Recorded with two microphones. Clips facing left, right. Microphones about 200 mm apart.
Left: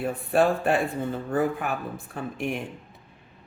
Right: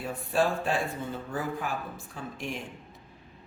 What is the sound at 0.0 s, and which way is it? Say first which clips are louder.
Speech: left 5 dB; 60° left (ahead or behind).